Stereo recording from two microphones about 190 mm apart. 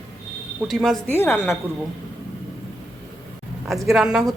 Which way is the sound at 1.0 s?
10° left (ahead or behind).